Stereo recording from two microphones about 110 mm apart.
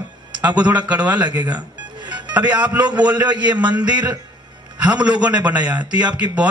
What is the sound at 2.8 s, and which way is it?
Speech, 40° right (ahead or behind).